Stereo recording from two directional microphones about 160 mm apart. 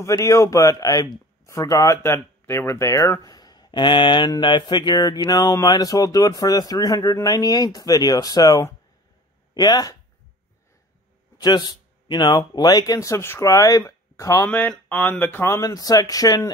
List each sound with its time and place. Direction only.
0.0 s speech: 20° left (ahead or behind)
11.4 s speech: 25° left (ahead or behind)